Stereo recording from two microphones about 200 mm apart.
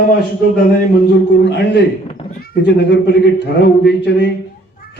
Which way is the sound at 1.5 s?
60° left (ahead or behind).